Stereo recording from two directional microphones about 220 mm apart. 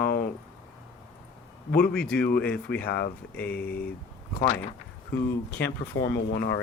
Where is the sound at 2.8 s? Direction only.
45° left (ahead or behind).